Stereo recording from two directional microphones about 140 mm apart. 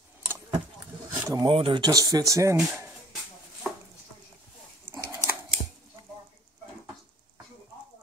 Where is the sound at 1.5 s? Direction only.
40° right (ahead or behind); by 2.6 s 20° right (ahead or behind).